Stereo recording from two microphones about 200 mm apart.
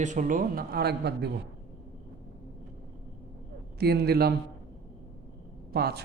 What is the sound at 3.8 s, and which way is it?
Speech, 55° right (ahead or behind).